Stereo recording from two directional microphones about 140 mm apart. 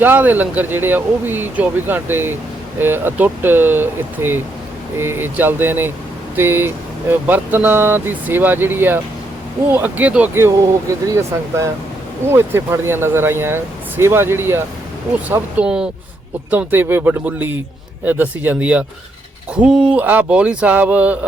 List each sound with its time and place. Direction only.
0.0 s speech: 15° right (ahead or behind)